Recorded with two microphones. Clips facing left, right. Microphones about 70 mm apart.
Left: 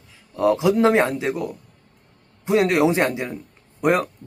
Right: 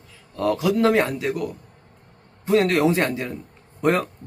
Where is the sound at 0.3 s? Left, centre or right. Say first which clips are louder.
Left 3 dB; centre.